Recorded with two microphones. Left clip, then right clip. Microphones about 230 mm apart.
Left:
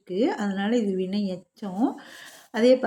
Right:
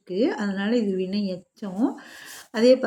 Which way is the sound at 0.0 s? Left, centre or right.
Centre.